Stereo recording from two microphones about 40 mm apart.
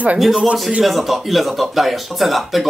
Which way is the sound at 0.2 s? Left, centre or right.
Centre.